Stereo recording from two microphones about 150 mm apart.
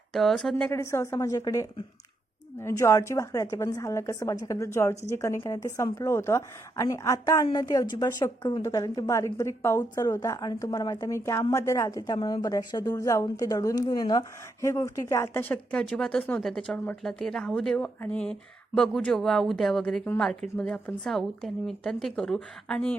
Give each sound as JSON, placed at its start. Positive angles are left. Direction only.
{"t": 0.1, "sound": "speech", "side_deg": 0}
{"t": 0.7, "sound": "a woman's voice", "side_deg": 20}